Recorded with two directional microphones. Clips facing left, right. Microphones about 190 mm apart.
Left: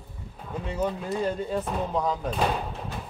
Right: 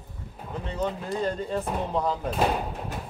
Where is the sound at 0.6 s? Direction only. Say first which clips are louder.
Left 1 dB; 10° left (ahead or behind).